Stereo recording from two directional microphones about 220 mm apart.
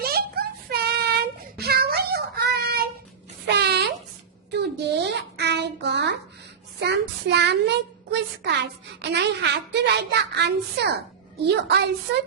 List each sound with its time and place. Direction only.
0.0 s child singing: 45° right (ahead or behind)
3.4 s a sound: 50° right (ahead or behind)
6.7 s a child's voice: 50° right (ahead or behind)